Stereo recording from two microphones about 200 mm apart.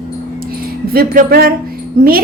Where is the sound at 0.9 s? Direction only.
50° right (ahead or behind).